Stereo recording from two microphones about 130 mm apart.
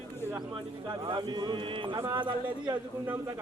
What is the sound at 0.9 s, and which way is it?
Speech, 35° right (ahead or behind).